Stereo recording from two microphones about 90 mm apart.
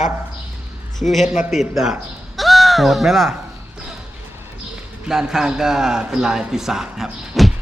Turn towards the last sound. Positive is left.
turn(degrees=-5)  # may be behind; listen again after turning